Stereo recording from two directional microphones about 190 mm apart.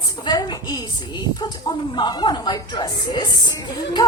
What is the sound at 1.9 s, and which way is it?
A woman's voice, 25° left (ahead or behind).